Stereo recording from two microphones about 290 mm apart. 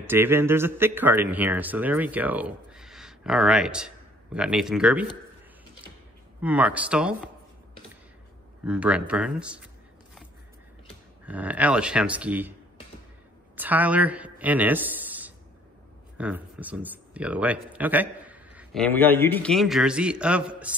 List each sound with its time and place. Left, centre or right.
0.0 s a man's voice: centre
6.4 s speech: centre
8.6 s speech: centre
11.2 s speech: centre
13.6 s speech: centre